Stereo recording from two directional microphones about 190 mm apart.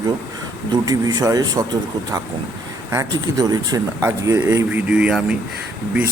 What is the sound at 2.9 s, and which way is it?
Speech, 15° right (ahead or behind).